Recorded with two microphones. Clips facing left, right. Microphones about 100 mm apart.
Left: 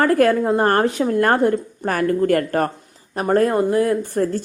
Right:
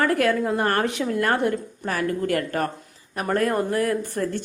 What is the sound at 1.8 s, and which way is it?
Speech, 50° left (ahead or behind).